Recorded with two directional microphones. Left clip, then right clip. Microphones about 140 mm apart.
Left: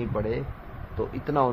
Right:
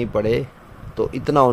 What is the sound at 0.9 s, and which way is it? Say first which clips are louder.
Speech: right 8 dB; 75° right (ahead or behind).